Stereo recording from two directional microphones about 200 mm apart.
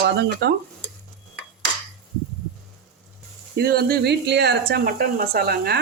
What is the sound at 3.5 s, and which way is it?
Speech, 50° right (ahead or behind).